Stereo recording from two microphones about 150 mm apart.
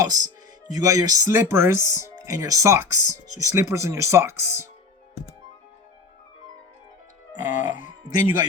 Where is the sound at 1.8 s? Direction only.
55° left (ahead or behind).